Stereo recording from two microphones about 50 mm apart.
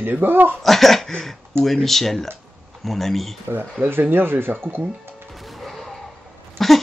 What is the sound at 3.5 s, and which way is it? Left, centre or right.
Speech, right.